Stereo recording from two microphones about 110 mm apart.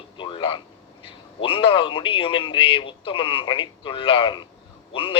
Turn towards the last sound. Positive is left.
turn(degrees=55)  # may be behind; listen again after turning